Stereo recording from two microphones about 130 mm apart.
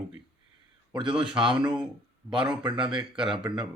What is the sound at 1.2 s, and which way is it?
A man's voice, 40° right (ahead or behind).